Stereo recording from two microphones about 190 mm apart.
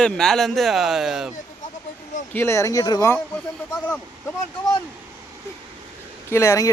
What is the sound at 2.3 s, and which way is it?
Speech, 15° left (ahead or behind).